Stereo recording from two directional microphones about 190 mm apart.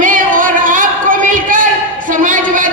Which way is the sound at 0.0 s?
45° right (ahead or behind).